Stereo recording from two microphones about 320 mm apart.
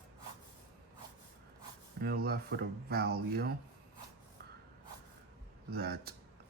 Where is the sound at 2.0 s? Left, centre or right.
Right.